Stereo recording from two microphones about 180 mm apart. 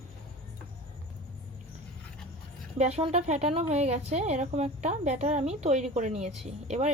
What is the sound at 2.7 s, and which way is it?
Speech, 35° right (ahead or behind).